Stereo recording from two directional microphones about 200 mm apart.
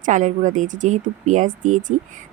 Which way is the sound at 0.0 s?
40° right (ahead or behind).